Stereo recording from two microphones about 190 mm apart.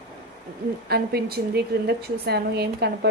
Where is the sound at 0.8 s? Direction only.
55° right (ahead or behind).